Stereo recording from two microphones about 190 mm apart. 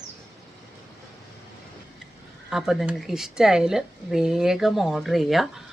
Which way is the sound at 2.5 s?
Centre (ahead or behind).